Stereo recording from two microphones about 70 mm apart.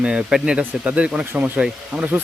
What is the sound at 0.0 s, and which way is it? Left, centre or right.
A man's voice, centre.